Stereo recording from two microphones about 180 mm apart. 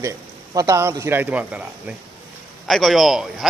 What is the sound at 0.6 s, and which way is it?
A man's voice, 15° right (ahead or behind).